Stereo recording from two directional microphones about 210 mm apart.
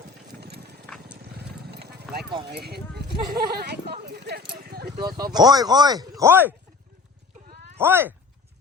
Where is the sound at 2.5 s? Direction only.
50° right (ahead or behind).